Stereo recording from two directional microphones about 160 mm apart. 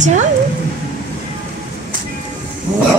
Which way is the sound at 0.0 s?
50° right (ahead or behind).